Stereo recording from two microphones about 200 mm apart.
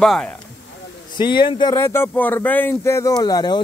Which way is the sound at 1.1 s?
25° left (ahead or behind).